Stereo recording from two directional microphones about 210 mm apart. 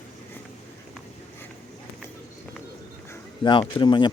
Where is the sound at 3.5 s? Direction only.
25° left (ahead or behind).